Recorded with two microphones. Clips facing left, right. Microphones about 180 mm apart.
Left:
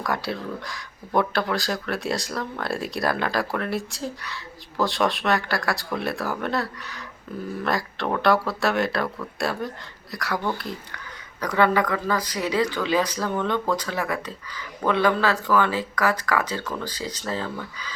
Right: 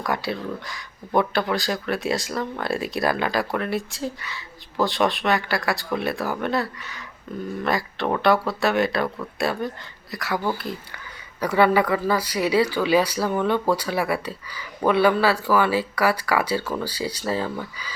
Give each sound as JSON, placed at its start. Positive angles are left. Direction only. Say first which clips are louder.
{"t": 0.0, "sound": "speech", "louder": "right 1 dB", "side_deg": 0}